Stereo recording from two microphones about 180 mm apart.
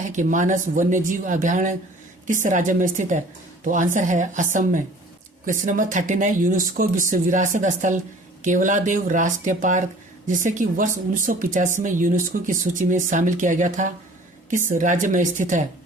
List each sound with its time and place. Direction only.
0.1 s speech: 45° right (ahead or behind)
5.5 s speech: 45° right (ahead or behind)